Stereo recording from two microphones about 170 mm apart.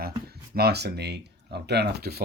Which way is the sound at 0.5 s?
70° right (ahead or behind).